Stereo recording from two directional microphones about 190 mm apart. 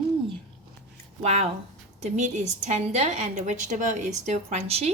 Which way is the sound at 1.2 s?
35° right (ahead or behind).